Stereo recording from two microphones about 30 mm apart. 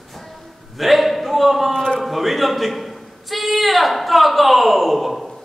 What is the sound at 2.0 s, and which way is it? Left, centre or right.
A man's voice, centre.